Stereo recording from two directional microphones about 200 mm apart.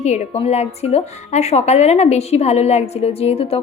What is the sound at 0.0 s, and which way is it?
A woman's voice, 35° left (ahead or behind).